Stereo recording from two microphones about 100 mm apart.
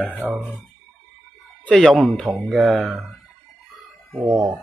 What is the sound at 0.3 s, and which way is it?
Speech, 10° right (ahead or behind).